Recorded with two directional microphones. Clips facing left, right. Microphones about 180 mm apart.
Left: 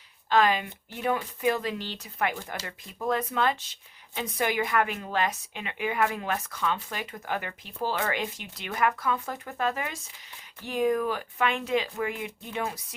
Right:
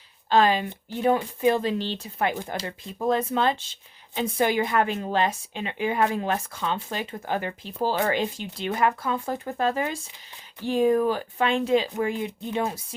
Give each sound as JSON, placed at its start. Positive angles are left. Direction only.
{"t": 0.3, "sound": "speech", "side_deg": -30}